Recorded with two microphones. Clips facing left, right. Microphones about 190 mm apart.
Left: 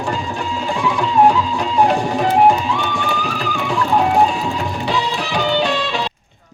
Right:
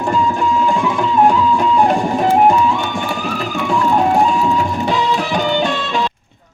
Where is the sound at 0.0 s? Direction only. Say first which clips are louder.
Right 6 dB; 50° right (ahead or behind).